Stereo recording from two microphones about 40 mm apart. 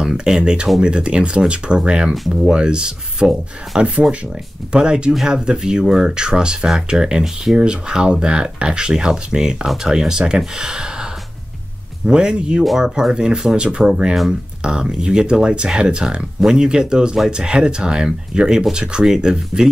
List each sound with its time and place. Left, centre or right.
0.0 s a sound: centre
0.4 s speech: right
12.1 s speech: right